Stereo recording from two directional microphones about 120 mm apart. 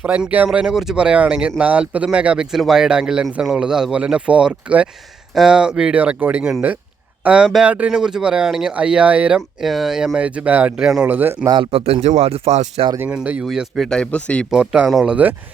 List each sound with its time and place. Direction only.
0.0 s speech: 10° right (ahead or behind)
11.1 s speech: 15° right (ahead or behind)
11.4 s speech: 40° right (ahead or behind); by 12.8 s 60° right (ahead or behind)
13.0 s speech: 10° right (ahead or behind); by 14.4 s 10° left (ahead or behind)
14.5 s speech: 10° right (ahead or behind)